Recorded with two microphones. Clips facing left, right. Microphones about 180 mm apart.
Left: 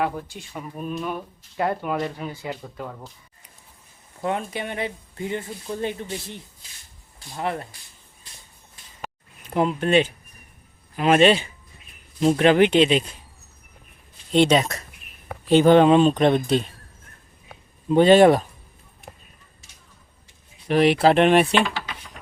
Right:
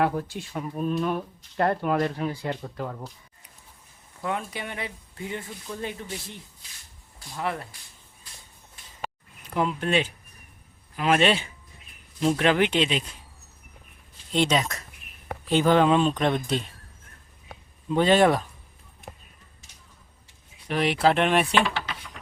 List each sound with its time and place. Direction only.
0.0 s speech: centre (ahead or behind)
4.2 s speech: 30° left (ahead or behind)
7.3 s speech: 25° left (ahead or behind)
9.5 s speech: 25° left (ahead or behind)
14.4 s speech: 30° left (ahead or behind)
17.9 s speech: 25° left (ahead or behind)
21.0 s speech: 30° left (ahead or behind)